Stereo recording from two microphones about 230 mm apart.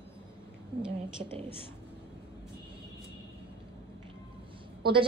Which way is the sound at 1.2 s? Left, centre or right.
Right.